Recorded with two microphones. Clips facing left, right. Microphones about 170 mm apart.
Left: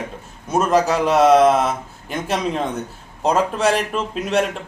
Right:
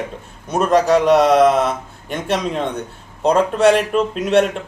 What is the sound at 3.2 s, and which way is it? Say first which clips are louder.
Speech: right 4 dB; centre (ahead or behind).